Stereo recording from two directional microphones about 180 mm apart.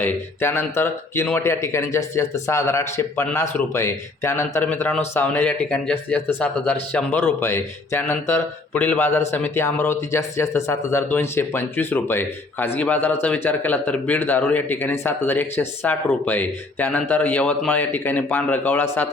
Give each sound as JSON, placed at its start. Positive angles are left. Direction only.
{"t": 0.0, "sound": "speech", "side_deg": 15}